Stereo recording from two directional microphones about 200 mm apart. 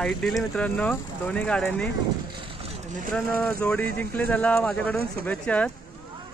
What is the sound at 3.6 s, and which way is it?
Speech, 10° left (ahead or behind).